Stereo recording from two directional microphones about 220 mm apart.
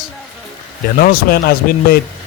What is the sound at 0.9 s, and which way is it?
A man's voice, 40° left (ahead or behind).